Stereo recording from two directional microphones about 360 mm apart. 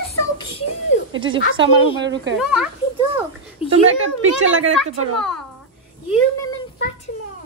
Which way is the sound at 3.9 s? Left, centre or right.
Right.